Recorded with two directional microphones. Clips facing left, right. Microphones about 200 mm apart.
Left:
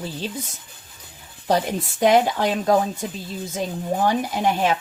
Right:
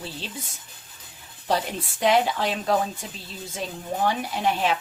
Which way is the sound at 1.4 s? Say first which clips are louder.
Left 5 dB; 45° left (ahead or behind).